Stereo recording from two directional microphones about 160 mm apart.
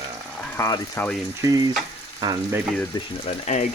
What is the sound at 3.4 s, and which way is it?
Speech, 50° left (ahead or behind).